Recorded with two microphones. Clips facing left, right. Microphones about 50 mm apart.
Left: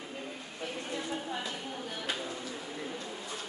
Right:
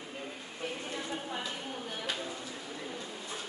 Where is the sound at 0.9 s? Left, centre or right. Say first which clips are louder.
Left 1 dB; centre.